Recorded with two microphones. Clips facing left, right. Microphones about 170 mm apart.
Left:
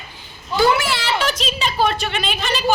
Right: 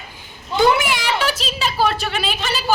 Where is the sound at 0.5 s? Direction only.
20° right (ahead or behind).